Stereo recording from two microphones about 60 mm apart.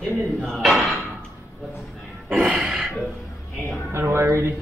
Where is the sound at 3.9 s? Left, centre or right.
Right.